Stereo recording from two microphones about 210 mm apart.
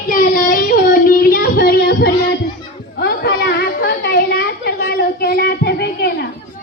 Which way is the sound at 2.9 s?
50° left (ahead or behind).